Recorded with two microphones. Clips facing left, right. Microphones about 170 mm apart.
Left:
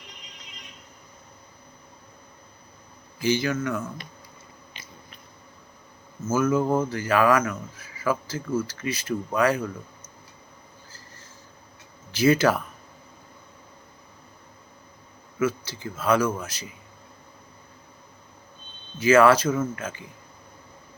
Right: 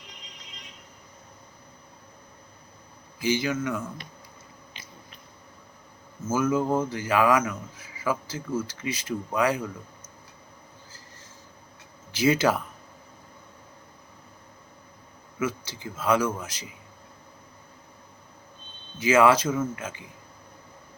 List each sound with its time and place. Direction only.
3.2 s a man's voice: 15° right (ahead or behind)
6.4 s a man's voice: 15° right (ahead or behind)
12.1 s a man's voice: 15° right (ahead or behind)
15.4 s a man's voice: 15° right (ahead or behind)
18.9 s a man's voice: 15° right (ahead or behind)